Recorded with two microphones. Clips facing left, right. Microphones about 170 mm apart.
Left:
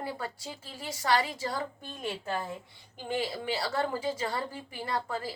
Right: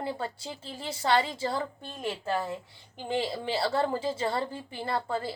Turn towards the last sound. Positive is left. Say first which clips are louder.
# right 3 dB
turn(degrees=-25)  # may be behind; listen again after turning